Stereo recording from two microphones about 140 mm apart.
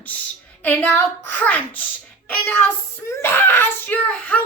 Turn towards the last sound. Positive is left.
turn(degrees=10)  # may be behind; listen again after turning